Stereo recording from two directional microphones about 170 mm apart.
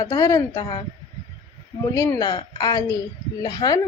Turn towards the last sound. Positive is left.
turn(degrees=25)  # may be behind; listen again after turning